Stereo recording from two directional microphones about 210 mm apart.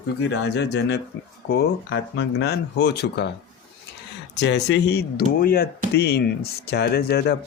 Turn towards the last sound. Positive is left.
turn(degrees=50)  # may be behind; listen again after turning